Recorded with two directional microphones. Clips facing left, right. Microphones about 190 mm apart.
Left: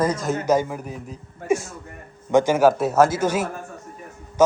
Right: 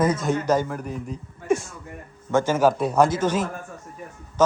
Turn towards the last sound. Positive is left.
turn(degrees=10)  # may be behind; listen again after turning